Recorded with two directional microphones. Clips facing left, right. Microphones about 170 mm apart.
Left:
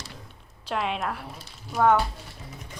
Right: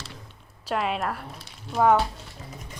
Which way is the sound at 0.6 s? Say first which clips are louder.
Right 2 dB; centre (ahead or behind).